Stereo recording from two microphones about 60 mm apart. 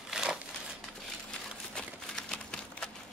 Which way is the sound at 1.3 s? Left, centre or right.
Centre.